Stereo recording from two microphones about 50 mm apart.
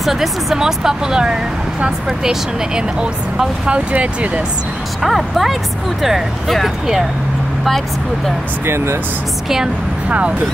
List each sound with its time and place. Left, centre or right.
0.0 s speech: centre; by 4.3 s right
5.0 s speech: centre
8.6 s speech: right
10.0 s speech: right